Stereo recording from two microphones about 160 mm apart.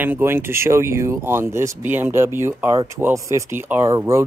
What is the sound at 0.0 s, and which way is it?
A man's voice, 15° right (ahead or behind).